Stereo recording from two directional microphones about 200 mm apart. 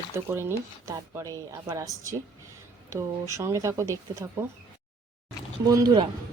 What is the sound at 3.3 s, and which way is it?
Speech, 15° right (ahead or behind).